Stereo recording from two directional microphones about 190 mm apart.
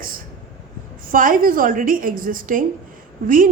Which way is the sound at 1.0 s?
45° right (ahead or behind).